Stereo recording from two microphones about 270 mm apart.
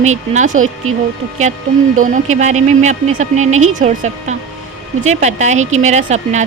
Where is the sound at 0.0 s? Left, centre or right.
Right.